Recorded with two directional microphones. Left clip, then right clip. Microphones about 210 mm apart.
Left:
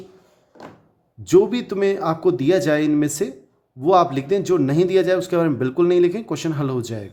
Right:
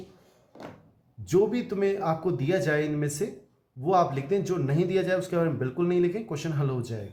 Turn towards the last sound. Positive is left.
turn(degrees=40)  # may be behind; listen again after turning